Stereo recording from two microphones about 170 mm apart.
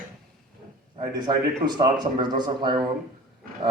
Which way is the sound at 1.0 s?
25° right (ahead or behind).